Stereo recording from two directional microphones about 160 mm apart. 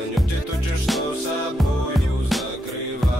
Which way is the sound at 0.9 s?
Centre (ahead or behind).